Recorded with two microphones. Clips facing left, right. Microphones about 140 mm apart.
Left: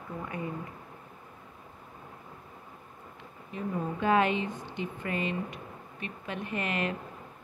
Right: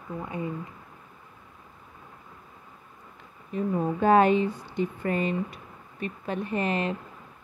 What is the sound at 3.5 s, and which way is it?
A woman's voice, 40° right (ahead or behind).